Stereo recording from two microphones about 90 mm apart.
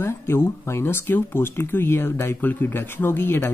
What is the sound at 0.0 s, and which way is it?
Speech, 25° left (ahead or behind).